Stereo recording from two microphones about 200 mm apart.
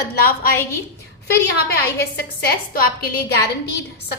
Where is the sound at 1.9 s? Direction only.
50° left (ahead or behind).